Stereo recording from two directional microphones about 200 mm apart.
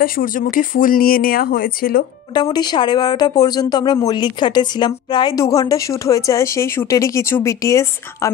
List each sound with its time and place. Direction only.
0.0 s speech: 45° left (ahead or behind)
2.3 s speech: 20° left (ahead or behind)